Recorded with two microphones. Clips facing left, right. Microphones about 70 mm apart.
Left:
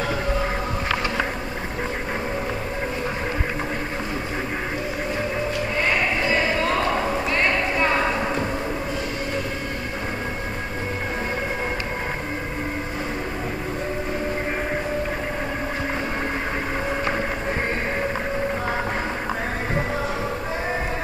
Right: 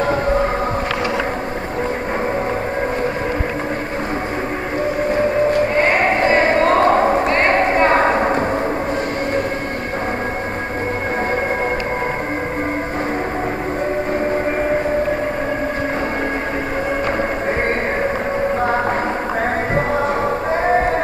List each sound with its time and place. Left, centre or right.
0.0 s music: right
5.1 s sheep: right
19.7 s music: right